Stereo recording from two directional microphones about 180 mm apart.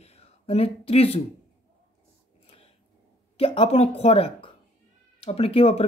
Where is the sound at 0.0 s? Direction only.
35° left (ahead or behind).